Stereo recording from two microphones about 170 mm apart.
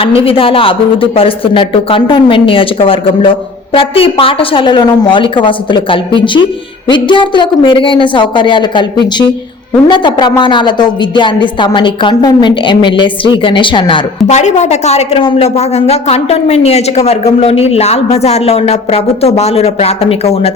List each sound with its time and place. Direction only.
0.0 s speech: 35° left (ahead or behind)
14.3 s speech: 40° left (ahead or behind)